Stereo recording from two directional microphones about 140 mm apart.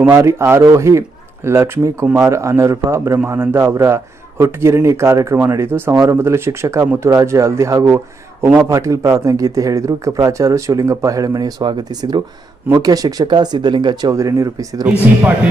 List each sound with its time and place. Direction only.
0.0 s a man's voice: 20° right (ahead or behind)